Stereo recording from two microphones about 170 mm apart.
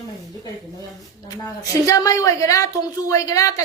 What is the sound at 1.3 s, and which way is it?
A woman's voice, 20° left (ahead or behind).